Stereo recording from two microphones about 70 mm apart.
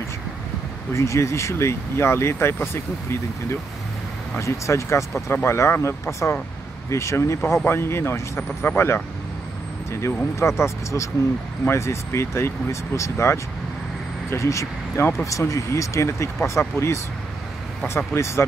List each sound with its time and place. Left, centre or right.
0.9 s speech: left
15.0 s speech: left
15.2 s speech: left